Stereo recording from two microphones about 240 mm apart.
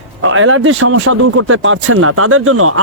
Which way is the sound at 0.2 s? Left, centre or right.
Right.